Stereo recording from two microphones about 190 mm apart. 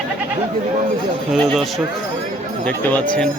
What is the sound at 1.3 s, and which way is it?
Speech, centre (ahead or behind).